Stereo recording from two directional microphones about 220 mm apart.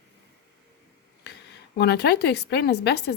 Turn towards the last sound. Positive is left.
turn(degrees=50)  # may be behind; listen again after turning